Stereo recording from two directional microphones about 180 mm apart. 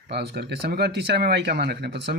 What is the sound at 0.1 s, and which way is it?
Speech, 65° right (ahead or behind).